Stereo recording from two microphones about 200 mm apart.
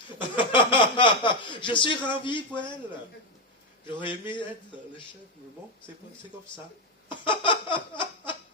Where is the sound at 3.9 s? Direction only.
25° left (ahead or behind).